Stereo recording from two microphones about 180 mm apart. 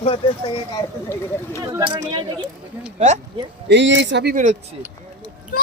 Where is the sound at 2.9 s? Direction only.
40° right (ahead or behind).